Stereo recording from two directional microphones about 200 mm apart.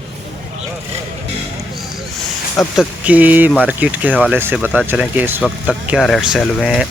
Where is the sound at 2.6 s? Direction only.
5° right (ahead or behind).